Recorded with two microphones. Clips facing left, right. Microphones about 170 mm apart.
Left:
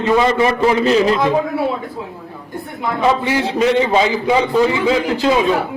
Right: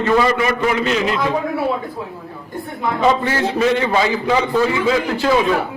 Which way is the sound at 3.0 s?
10° left (ahead or behind).